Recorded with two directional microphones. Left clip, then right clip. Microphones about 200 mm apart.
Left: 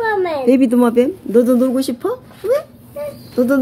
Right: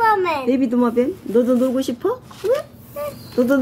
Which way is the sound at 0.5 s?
30° left (ahead or behind).